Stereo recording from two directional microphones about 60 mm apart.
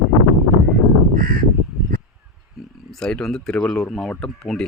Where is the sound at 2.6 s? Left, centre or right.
Centre.